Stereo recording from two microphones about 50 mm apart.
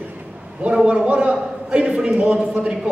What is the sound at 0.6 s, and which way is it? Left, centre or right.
A man's voice, right.